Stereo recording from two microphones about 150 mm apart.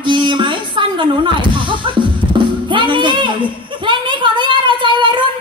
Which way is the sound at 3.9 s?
35° right (ahead or behind).